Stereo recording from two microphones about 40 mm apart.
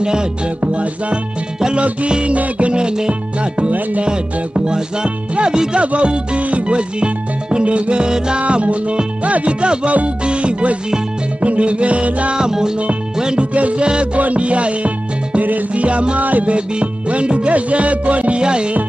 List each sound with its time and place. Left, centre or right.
1.6 s music: right
12.4 s music: centre
13.6 s music: right
16.2 s music: right
16.5 s music: right